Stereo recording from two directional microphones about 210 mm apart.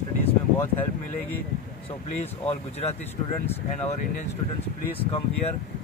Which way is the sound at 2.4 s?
30° left (ahead or behind).